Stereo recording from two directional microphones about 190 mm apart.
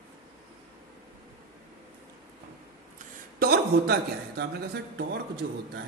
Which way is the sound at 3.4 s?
55° right (ahead or behind).